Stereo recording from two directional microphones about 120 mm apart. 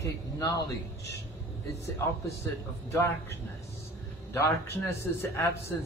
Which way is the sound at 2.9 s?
20° left (ahead or behind).